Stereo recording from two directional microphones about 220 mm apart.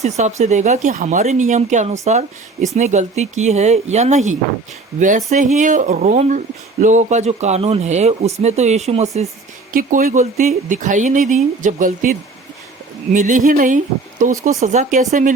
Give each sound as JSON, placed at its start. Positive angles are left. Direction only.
{"t": 0.0, "sound": "speech", "side_deg": -30}
{"t": 13.1, "sound": "speech", "side_deg": -35}